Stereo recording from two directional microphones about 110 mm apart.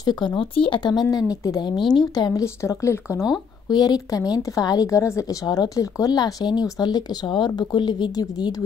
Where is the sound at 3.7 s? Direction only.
40° left (ahead or behind).